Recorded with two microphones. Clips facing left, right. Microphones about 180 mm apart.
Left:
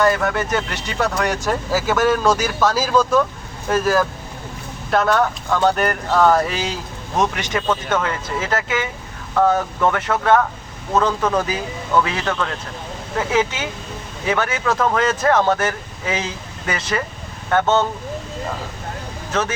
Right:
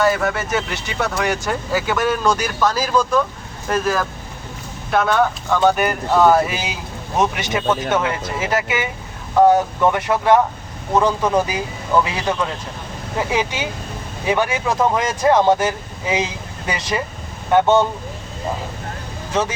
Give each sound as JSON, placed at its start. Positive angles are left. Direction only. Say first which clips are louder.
{"t": 0.0, "sound": "speech", "louder": "even", "side_deg": -5}